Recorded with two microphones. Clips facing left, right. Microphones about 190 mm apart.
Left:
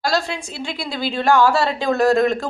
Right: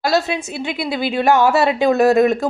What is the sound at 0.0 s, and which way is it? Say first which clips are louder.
A woman's voice: right 4 dB; 20° right (ahead or behind).